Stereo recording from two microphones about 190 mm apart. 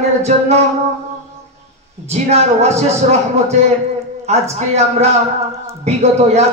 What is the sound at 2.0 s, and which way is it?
Speech, 35° right (ahead or behind).